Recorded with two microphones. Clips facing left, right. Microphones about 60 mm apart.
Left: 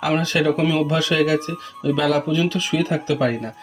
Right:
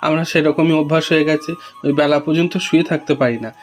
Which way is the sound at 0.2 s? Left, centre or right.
Right.